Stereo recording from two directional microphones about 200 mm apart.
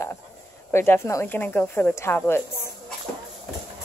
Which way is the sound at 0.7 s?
10° left (ahead or behind).